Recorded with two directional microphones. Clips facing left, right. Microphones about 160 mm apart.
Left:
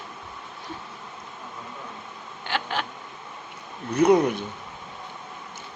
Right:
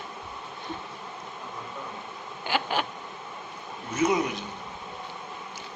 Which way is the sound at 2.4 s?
5° right (ahead or behind).